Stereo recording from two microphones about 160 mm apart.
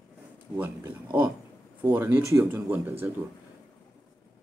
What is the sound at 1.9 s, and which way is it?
Speech, 10° right (ahead or behind).